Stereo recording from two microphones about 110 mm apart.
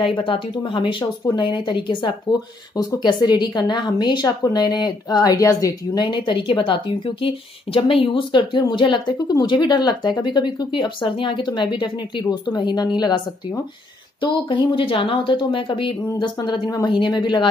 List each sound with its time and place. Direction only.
0.0 s a woman's voice: 50° left (ahead or behind); by 6.0 s 30° left (ahead or behind)
6.0 s speech: 45° left (ahead or behind)
14.2 s speech: 50° left (ahead or behind)
16.3 s a woman's voice: 40° left (ahead or behind)